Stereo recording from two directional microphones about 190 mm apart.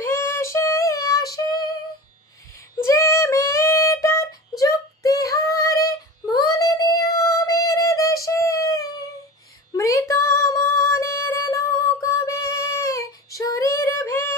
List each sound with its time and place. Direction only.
0.0 s female singing: 15° left (ahead or behind)
2.8 s female singing: 15° left (ahead or behind)
9.7 s music: 15° left (ahead or behind)